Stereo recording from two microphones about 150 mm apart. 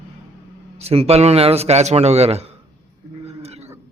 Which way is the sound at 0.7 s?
45° right (ahead or behind).